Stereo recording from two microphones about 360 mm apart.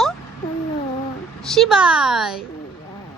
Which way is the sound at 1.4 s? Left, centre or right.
Centre.